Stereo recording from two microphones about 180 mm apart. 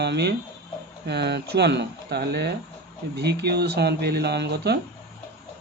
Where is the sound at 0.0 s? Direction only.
70° right (ahead or behind).